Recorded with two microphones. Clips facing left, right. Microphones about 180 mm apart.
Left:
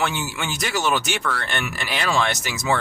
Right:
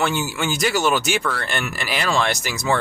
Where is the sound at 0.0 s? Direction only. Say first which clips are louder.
Right 3 dB; centre (ahead or behind).